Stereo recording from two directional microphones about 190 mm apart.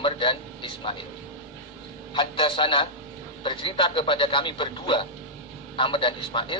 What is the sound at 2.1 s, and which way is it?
A man's voice, 25° left (ahead or behind).